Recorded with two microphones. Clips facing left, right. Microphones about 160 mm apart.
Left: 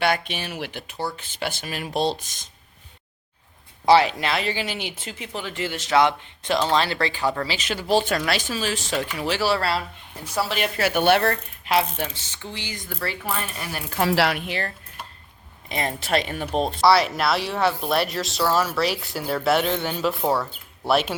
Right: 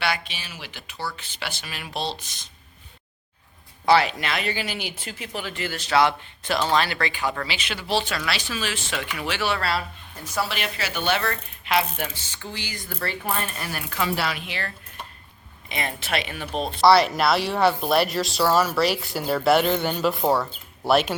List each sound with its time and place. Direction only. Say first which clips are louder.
0.0 s speech: left 5 dB; 50° left (ahead or behind)
3.8 s speech: left 2 dB; 30° left (ahead or behind)
6.7 s speech: left 1 dB; 30° left (ahead or behind)
10.5 s speech: left 7 dB; 50° left (ahead or behind)
11.6 s speech: left 1 dB; 35° left (ahead or behind)
12.3 s speech: even; 25° left (ahead or behind)
14.0 s speech: left 5 dB; 75° left (ahead or behind)
14.3 s speech: left 4 dB; 45° left (ahead or behind)
15.7 s speech: left 4 dB; 40° left (ahead or behind)
16.8 s speech: right 3 dB; centre (ahead or behind)